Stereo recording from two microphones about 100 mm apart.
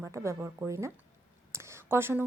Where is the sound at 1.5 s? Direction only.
25° right (ahead or behind).